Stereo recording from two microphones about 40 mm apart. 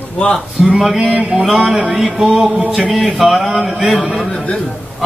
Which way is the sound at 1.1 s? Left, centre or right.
Right.